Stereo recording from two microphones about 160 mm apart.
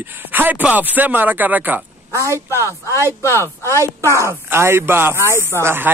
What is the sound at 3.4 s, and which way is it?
Speech, 15° left (ahead or behind).